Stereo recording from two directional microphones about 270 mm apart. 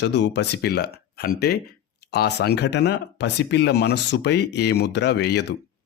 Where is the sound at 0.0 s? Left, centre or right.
Left.